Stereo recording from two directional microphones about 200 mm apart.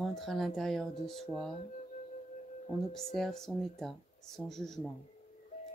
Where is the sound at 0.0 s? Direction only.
Centre (ahead or behind).